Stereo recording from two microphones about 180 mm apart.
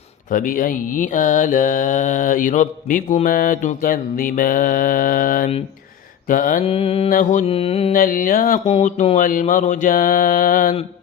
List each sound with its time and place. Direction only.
0.3 s mantra: 50° left (ahead or behind)
6.7 s mantra: 35° left (ahead or behind)
7.1 s mantra: 45° left (ahead or behind)
7.4 s mantra: 35° left (ahead or behind)
7.9 s mantra: 50° left (ahead or behind)